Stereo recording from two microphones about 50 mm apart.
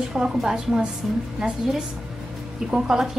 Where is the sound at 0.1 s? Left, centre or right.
Centre.